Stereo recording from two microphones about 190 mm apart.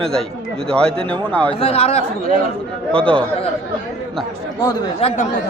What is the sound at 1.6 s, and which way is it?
Speech, 30° left (ahead or behind).